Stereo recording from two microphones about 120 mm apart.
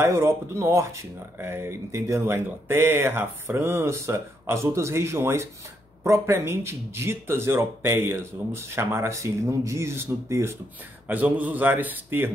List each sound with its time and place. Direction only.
0.0 s a man's voice: 20° right (ahead or behind)